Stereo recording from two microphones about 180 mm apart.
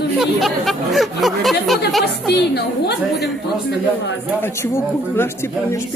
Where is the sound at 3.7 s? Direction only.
80° left.